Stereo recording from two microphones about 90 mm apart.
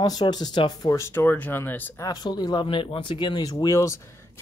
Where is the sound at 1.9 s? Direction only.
45° left (ahead or behind).